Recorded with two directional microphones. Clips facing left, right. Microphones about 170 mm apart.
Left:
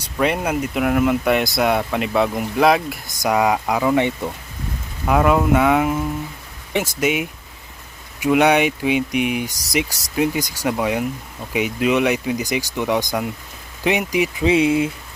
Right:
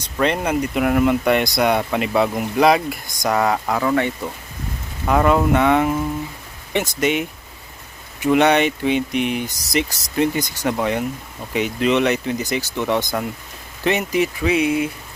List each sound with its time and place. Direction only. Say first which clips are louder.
0.0 s speech: even; 5° left (ahead or behind)
5.0 s speech: even; 5° left (ahead or behind)
14.4 s speech: left 5 dB; 25° left (ahead or behind)